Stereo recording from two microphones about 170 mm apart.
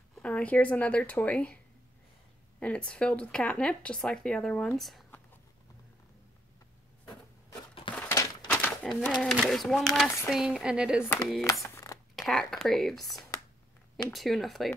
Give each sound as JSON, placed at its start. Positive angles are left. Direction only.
{"t": 0.1, "sound": "speech", "side_deg": 5}
{"t": 2.6, "sound": "speech", "side_deg": 5}
{"t": 7.9, "sound": "a sound", "side_deg": 20}
{"t": 8.5, "sound": "speech", "side_deg": 10}
{"t": 11.6, "sound": "a sound", "side_deg": 20}
{"t": 12.2, "sound": "speech", "side_deg": 0}